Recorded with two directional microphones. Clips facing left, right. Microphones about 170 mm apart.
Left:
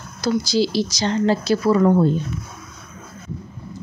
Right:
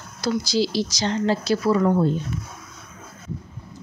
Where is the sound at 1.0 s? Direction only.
50° left (ahead or behind).